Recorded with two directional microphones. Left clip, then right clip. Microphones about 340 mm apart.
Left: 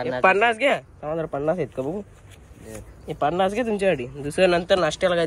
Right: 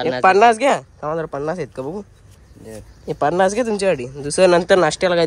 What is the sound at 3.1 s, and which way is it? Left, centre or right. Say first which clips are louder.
Speech: right 5 dB; centre.